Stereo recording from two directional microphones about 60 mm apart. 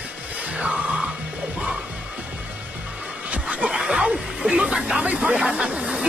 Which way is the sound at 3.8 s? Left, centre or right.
Centre.